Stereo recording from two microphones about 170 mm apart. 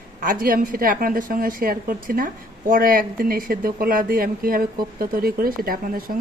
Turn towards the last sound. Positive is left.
turn(degrees=-60)  # may be behind; listen again after turning